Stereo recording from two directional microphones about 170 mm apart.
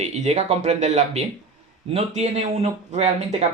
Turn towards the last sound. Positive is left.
turn(degrees=-40)  # may be behind; listen again after turning